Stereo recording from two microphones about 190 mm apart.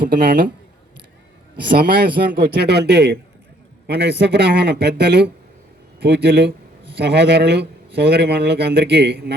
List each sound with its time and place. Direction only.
0.0 s a man's voice: 50° right (ahead or behind)
1.8 s speech: 50° right (ahead or behind)